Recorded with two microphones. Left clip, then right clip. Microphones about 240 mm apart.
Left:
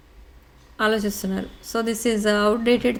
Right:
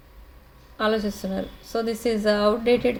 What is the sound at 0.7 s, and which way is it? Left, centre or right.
Speech, left.